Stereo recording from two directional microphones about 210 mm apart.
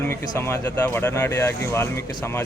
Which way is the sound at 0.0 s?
10° left (ahead or behind).